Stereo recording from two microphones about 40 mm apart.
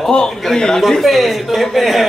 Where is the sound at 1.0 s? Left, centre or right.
Centre.